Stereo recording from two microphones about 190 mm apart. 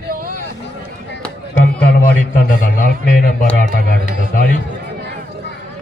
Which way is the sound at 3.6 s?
45° right (ahead or behind).